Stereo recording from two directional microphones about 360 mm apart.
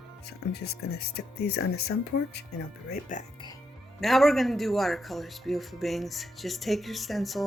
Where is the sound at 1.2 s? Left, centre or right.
Left.